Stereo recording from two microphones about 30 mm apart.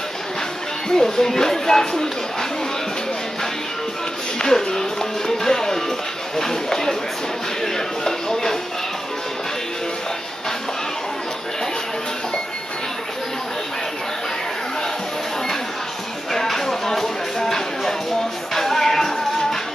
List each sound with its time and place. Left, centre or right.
0.8 s speech: centre
4.4 s music: left
7.6 s a sound: centre
16.5 s music: centre